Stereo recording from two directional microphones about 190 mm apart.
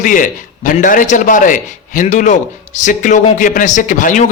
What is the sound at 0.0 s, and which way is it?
A man's voice, 45° left (ahead or behind).